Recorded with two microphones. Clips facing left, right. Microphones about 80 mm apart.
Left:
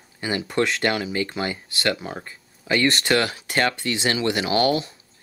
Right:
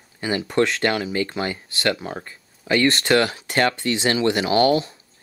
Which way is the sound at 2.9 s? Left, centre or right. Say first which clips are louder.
Right 3 dB; right.